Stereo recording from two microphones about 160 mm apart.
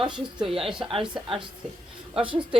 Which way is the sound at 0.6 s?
30° right (ahead or behind).